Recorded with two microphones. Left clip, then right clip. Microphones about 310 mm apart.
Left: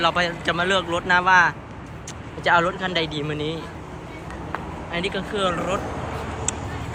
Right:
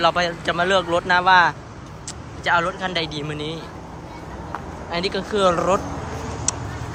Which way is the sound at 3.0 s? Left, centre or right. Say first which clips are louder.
Left 1 dB; right.